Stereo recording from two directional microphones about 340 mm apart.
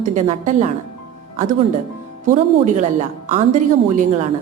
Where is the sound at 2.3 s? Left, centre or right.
Right.